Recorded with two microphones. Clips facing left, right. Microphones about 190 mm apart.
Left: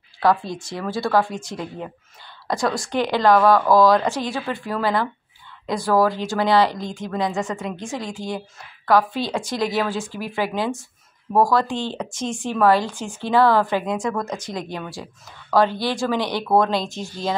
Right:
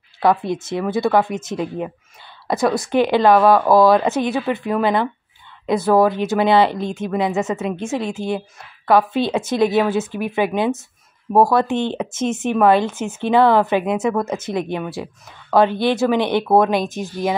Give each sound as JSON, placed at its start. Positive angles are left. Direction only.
{"t": 0.2, "sound": "speech", "side_deg": -20}